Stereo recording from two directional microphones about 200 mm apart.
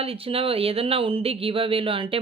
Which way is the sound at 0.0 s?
30° right (ahead or behind).